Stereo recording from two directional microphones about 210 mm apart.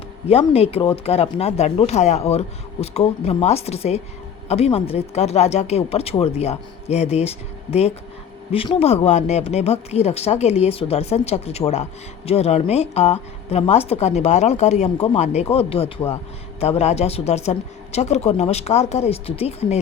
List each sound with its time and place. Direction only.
0.3 s speech: 30° left (ahead or behind)